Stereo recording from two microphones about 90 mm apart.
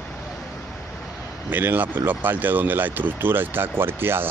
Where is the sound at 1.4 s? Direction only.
20° right (ahead or behind).